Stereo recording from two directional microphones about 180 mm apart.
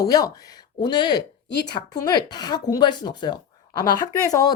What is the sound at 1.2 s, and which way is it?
Speech, 65° left (ahead or behind).